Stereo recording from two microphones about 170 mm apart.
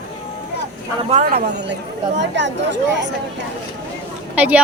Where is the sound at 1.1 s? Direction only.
45° right (ahead or behind).